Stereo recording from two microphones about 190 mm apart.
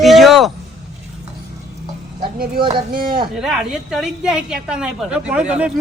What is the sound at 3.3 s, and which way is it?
A woman's voice, centre (ahead or behind).